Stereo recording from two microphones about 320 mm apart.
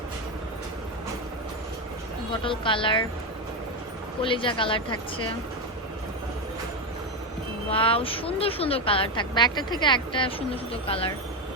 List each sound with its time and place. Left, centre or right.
2.4 s speech: centre
4.2 s speech: centre
7.7 s speech: centre